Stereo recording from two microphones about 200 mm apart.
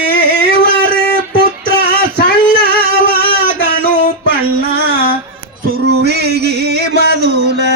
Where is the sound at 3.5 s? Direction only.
50° right (ahead or behind).